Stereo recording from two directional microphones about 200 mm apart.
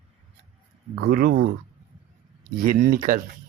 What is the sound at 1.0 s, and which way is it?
Speech, 50° right (ahead or behind).